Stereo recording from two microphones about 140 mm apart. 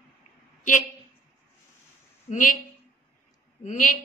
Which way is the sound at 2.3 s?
70° left (ahead or behind).